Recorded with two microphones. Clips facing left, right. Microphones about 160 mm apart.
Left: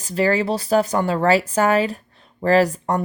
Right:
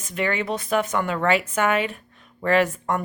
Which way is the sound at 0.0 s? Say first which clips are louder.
Left 6 dB; 35° left (ahead or behind).